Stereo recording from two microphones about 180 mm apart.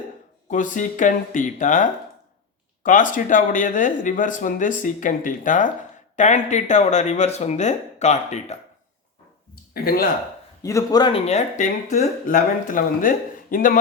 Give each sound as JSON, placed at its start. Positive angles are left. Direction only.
{"t": 0.4, "sound": "speech", "side_deg": 45}
{"t": 9.7, "sound": "speech", "side_deg": 55}
{"t": 10.6, "sound": "a man's voice", "side_deg": 20}
{"t": 11.3, "sound": "speech", "side_deg": 40}